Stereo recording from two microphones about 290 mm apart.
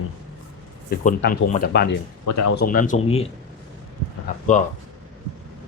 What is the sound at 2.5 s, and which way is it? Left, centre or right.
Speech, left.